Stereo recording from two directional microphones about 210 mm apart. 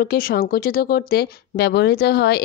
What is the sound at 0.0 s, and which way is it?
A woman's voice, 45° left (ahead or behind).